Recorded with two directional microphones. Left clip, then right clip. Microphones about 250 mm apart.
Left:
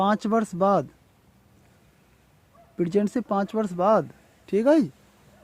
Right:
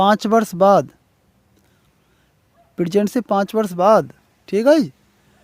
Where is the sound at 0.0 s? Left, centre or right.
Right.